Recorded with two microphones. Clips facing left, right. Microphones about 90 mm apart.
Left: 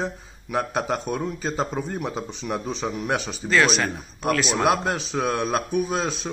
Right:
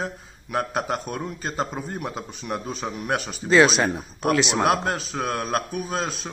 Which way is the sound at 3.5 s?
30° right (ahead or behind).